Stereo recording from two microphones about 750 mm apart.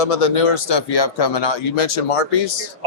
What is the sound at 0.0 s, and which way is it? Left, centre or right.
Speech, left.